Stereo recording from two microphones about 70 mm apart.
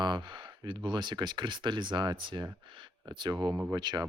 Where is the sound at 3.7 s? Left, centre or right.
Right.